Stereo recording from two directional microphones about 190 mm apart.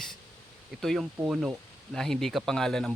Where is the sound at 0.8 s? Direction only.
Centre (ahead or behind).